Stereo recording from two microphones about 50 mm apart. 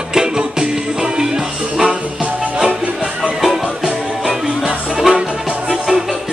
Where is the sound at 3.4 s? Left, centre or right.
Centre.